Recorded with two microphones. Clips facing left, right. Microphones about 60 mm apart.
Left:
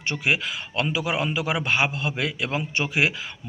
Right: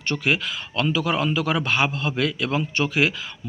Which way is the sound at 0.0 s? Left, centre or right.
Centre.